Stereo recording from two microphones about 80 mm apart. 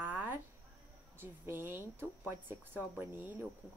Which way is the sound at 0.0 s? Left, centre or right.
Right.